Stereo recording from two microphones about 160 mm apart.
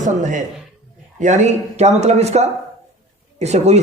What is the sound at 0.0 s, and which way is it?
A man's voice, 50° right (ahead or behind).